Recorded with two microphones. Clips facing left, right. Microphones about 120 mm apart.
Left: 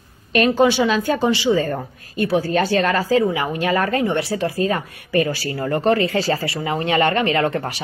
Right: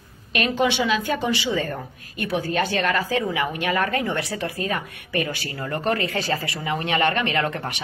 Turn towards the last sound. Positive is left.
turn(degrees=30)  # may be behind; listen again after turning